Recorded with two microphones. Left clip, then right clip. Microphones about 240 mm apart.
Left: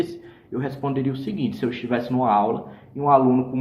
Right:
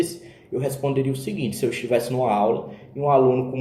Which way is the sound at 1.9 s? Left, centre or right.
Left.